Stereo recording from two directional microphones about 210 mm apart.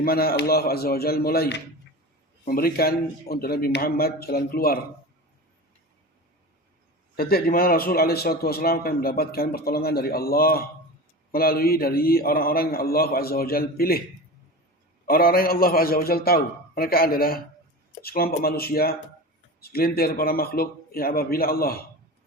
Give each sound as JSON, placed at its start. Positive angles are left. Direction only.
{"t": 0.0, "sound": "a man's voice", "side_deg": 45}
{"t": 7.2, "sound": "a man's voice", "side_deg": 45}
{"t": 15.0, "sound": "a man's voice", "side_deg": 45}